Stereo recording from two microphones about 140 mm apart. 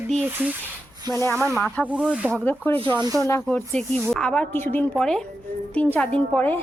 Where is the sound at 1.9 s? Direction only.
10° right (ahead or behind).